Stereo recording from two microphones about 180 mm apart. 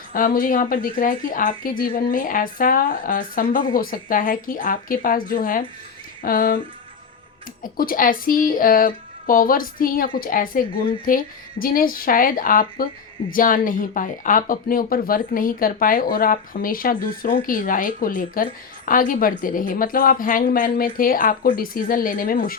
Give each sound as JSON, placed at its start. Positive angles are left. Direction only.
{"t": 0.1, "sound": "speech", "side_deg": 50}
{"t": 7.6, "sound": "speech", "side_deg": 50}